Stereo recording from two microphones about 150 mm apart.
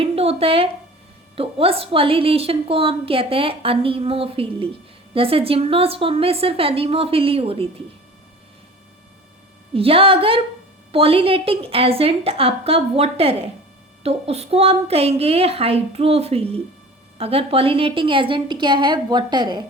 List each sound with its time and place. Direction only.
0.0 s a woman's voice: 40° right (ahead or behind)
9.7 s a woman's voice: 40° right (ahead or behind)